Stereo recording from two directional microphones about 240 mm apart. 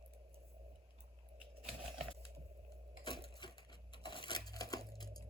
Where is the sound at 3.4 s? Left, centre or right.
Centre.